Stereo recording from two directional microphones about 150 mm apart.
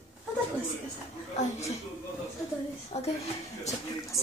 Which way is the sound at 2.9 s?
45° left (ahead or behind).